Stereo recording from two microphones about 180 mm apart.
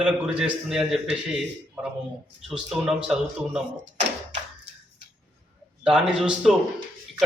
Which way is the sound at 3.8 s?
75° right (ahead or behind).